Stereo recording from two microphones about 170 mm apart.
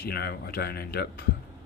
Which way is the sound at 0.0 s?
65° left (ahead or behind).